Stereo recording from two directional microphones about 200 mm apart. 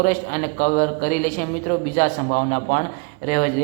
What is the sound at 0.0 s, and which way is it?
A woman's voice, 40° left (ahead or behind).